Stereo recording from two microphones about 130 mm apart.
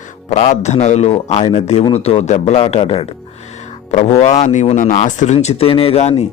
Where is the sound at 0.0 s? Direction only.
65° left (ahead or behind).